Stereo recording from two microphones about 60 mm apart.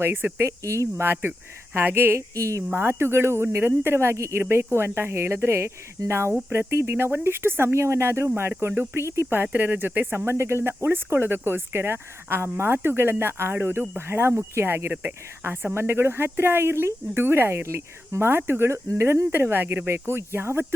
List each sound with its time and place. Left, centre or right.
0.0 s speech: right
0.3 s speech: right
1.0 s speech: right
2.1 s speech: right
2.6 s speech: right
8.7 s speech: right
9.0 s speech: right
9.3 s speech: right